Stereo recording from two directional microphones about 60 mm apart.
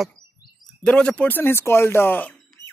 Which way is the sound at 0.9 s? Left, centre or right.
Centre.